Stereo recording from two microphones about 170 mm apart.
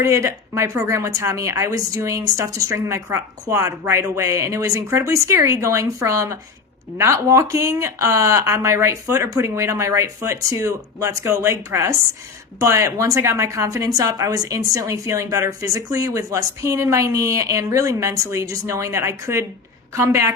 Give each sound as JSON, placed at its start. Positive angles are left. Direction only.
{"t": 0.0, "sound": "a woman's voice", "side_deg": -15}